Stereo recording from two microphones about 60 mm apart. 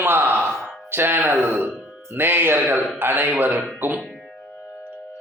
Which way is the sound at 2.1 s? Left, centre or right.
Right.